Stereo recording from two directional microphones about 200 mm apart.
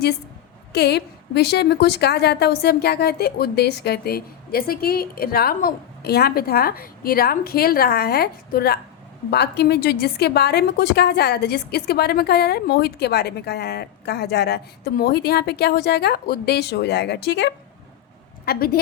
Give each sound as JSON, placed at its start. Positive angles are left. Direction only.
{"t": 0.7, "sound": "a woman's voice", "side_deg": 55}